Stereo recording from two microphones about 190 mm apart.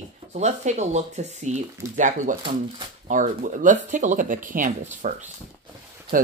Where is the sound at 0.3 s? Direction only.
40° right (ahead or behind).